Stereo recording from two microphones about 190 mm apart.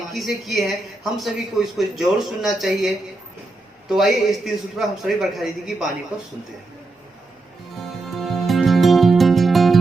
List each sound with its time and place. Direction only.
0.1 s speech: centre (ahead or behind)
7.8 s music: centre (ahead or behind)